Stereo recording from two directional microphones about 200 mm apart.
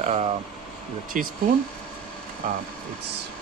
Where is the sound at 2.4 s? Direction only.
40° right (ahead or behind).